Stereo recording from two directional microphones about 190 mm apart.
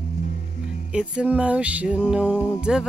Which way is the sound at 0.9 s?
5° right (ahead or behind).